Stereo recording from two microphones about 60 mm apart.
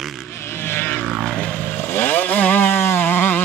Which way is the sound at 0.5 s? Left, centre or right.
Left.